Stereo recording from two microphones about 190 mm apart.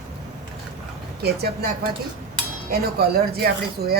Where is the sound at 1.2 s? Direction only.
55° right (ahead or behind).